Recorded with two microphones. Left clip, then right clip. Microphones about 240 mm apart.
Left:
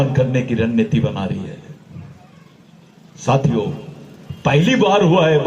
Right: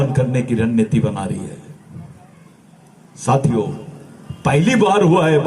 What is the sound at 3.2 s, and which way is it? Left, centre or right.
A man's voice, right.